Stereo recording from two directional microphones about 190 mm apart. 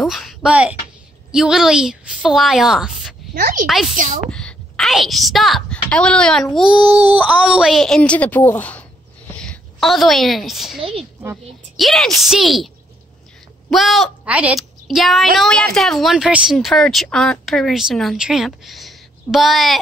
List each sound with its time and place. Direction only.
0.0 s a woman's voice: centre (ahead or behind)
3.3 s a woman's voice: 45° right (ahead or behind)
3.6 s speech: centre (ahead or behind)
3.9 s a woman's voice: 45° right (ahead or behind)
4.3 s a woman's voice: 5° left (ahead or behind)
10.8 s speech: 30° right (ahead or behind)
11.7 s a woman's voice: centre (ahead or behind)